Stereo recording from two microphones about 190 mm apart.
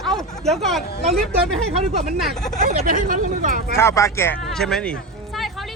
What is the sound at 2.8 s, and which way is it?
Speech, 45° right (ahead or behind).